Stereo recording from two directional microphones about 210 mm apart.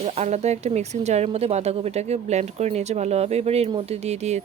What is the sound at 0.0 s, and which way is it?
Speech, 30° right (ahead or behind).